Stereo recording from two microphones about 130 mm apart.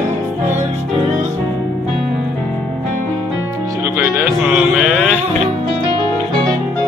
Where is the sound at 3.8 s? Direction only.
15° right (ahead or behind).